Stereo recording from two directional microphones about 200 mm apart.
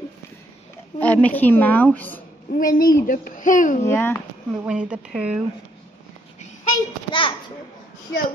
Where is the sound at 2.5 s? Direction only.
45° left (ahead or behind).